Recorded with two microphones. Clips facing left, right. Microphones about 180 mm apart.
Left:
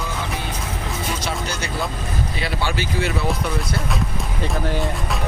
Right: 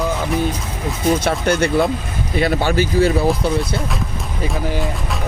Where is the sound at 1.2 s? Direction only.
55° right (ahead or behind).